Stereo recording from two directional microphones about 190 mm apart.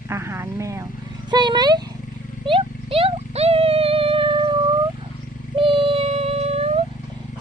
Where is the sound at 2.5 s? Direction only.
30° right (ahead or behind).